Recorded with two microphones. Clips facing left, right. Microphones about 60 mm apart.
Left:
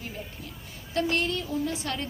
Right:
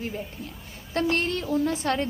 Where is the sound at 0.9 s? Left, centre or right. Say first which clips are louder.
Right 2 dB; right.